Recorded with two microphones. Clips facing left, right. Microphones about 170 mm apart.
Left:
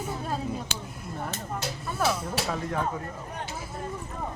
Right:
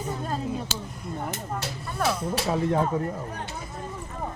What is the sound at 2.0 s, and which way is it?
Speech, 5° left (ahead or behind).